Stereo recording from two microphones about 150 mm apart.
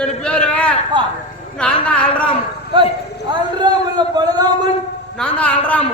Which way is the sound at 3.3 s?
30° right (ahead or behind).